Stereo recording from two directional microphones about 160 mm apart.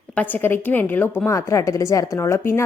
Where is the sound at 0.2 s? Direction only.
10° left (ahead or behind).